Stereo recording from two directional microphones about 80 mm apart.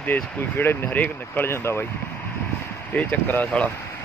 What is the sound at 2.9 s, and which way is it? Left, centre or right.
Speech, centre.